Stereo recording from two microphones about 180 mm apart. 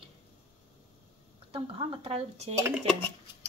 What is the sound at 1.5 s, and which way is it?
Speech, 30° right (ahead or behind).